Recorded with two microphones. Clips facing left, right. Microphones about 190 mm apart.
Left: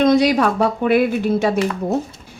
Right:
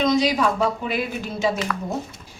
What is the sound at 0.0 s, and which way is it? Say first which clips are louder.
A woman's voice: left 5 dB; 55° left (ahead or behind).